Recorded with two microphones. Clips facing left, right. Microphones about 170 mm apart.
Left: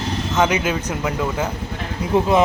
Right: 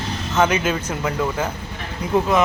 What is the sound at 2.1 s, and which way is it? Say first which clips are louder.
Speech: left 2 dB; 30° left (ahead or behind).